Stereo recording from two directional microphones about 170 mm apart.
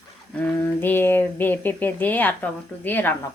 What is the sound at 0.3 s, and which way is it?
Speech, 10° left (ahead or behind).